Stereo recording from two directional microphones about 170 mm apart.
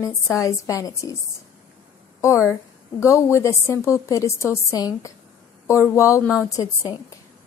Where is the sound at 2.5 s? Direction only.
15° left (ahead or behind).